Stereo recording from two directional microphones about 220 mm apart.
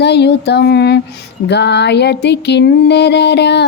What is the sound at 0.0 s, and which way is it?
Music, 50° left (ahead or behind).